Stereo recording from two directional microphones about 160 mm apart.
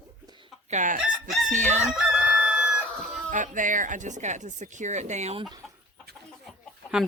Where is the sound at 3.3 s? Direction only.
55° right (ahead or behind).